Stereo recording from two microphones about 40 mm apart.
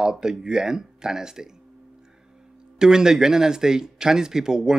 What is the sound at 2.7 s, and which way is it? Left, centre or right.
Speech, centre.